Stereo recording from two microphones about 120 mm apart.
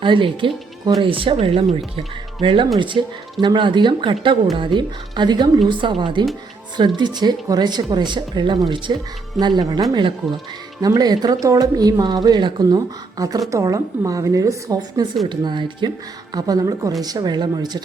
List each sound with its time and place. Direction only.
0.0 s a woman's voice: 45° right (ahead or behind)